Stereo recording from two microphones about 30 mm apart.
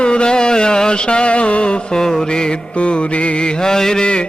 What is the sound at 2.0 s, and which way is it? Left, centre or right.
Mantra, centre.